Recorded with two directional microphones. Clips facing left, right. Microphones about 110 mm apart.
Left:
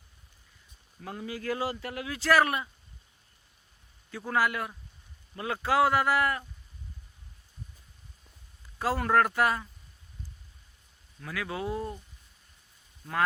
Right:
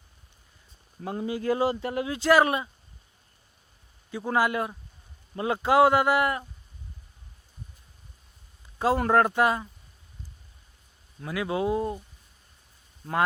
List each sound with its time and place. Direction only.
1.0 s speech: 25° right (ahead or behind)
4.1 s speech: 20° right (ahead or behind)
8.8 s speech: 25° right (ahead or behind)
11.2 s speech: 25° right (ahead or behind)